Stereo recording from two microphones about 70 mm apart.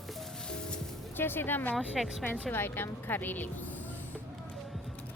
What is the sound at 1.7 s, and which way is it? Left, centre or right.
Speech, centre.